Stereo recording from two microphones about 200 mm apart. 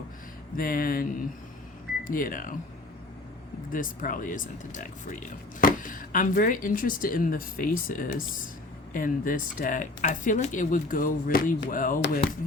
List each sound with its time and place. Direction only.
0.5 s speech: 45° left (ahead or behind)
2.0 s speech: 45° left (ahead or behind)
3.7 s speech: 45° left (ahead or behind)